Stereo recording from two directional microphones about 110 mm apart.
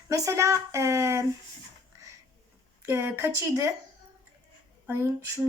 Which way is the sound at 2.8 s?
20° right (ahead or behind).